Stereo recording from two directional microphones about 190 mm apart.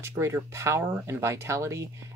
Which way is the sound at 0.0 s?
15° right (ahead or behind).